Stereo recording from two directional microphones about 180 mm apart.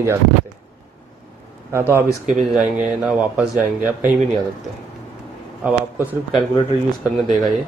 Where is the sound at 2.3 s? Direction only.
Centre (ahead or behind).